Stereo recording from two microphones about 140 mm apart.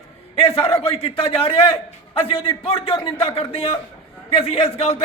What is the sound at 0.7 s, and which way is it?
A man's voice, 40° left (ahead or behind).